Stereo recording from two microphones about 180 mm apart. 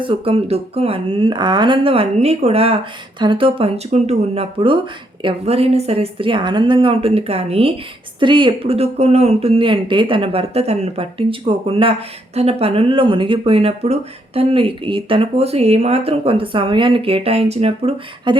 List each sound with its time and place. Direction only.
0.0 s speech: 30° right (ahead or behind)